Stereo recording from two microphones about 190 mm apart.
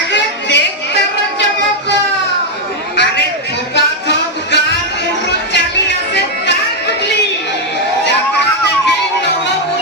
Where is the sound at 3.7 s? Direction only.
65° left (ahead or behind).